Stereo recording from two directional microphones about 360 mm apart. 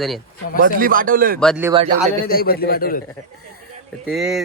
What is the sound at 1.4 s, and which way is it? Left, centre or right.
Speech, centre.